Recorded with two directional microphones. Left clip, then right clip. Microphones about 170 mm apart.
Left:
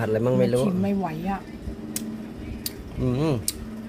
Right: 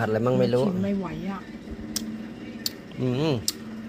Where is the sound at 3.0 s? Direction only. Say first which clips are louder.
Even; 10° left (ahead or behind).